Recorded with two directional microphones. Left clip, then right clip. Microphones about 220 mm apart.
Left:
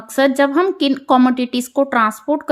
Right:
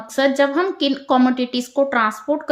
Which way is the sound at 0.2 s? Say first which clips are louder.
Left 3 dB; 30° left (ahead or behind).